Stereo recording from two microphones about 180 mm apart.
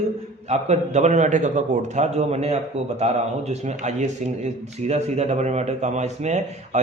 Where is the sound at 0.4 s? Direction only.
40° right (ahead or behind).